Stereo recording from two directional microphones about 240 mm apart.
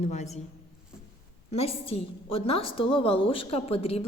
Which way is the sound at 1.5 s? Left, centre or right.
Left.